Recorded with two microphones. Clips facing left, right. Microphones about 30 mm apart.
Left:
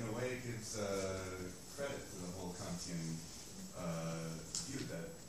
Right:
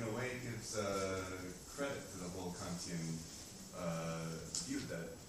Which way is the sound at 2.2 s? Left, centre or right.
Centre.